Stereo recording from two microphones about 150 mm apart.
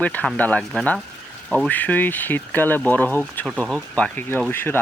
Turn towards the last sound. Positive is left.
turn(degrees=15)  # may be behind; listen again after turning